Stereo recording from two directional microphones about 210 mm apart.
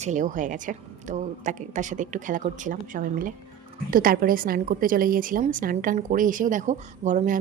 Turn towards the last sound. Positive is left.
turn(degrees=-35)  # may be behind; listen again after turning